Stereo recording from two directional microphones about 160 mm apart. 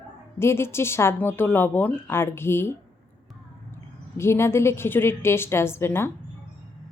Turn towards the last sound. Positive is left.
turn(degrees=15)  # may be behind; listen again after turning